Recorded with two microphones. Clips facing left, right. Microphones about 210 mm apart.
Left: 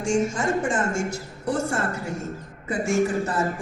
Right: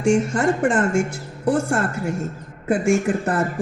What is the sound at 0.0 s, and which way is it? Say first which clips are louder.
A woman's voice: right 5 dB; 60° right (ahead or behind).